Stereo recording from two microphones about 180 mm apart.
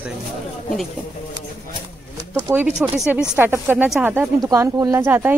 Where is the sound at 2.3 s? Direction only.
10° right (ahead or behind).